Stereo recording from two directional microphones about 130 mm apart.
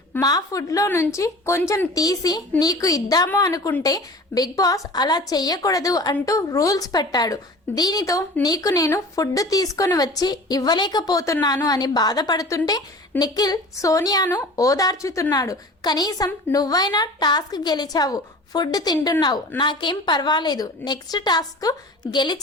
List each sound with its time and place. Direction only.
0.2 s a woman's voice: 30° left (ahead or behind)